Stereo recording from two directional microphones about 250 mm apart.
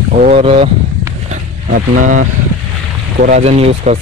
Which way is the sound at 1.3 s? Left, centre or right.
Right.